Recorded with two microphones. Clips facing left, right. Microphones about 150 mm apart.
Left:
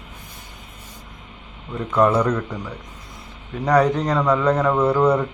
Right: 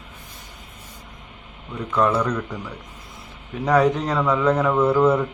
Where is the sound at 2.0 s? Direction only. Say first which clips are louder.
Left 3 dB; 10° left (ahead or behind).